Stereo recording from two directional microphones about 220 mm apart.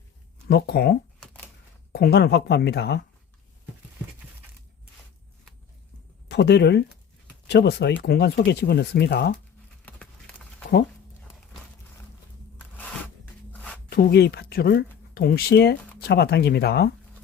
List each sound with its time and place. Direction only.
0.4 s speech: 45° left (ahead or behind)
6.2 s speech: 50° left (ahead or behind)
9.8 s a sound: 5° left (ahead or behind)
12.5 s a sound: 5° left (ahead or behind)
13.5 s shuffling cards: 5° left (ahead or behind)
13.9 s speech: 45° left (ahead or behind)